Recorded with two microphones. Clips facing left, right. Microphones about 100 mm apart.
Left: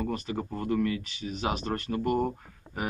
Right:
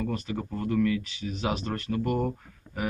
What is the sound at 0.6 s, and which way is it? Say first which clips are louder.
A man's voice: right 3 dB; 35° left (ahead or behind).